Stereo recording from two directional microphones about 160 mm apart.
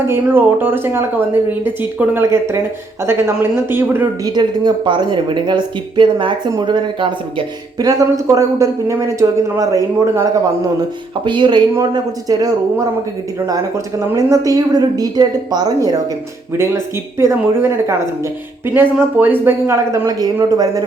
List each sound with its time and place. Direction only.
0.1 s a woman's voice: 15° right (ahead or behind)
4.3 s a woman's voice: 25° right (ahead or behind)